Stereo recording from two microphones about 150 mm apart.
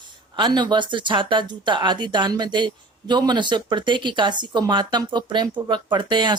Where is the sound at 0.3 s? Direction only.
30° right (ahead or behind).